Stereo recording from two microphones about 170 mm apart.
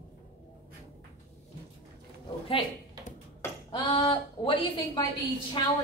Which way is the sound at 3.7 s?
35° left (ahead or behind).